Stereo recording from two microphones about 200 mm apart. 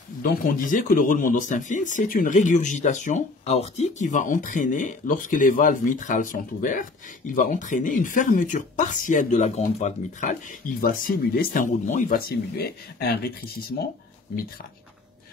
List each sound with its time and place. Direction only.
0.2 s speech: 45° left (ahead or behind)